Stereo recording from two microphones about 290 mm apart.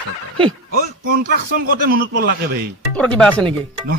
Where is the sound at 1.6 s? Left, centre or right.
Right.